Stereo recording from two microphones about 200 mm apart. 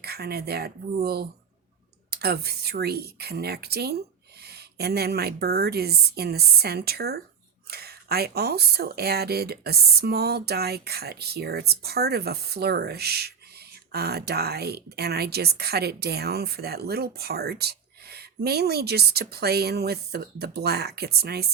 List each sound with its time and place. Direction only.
0.0 s a woman's voice: 50° right (ahead or behind)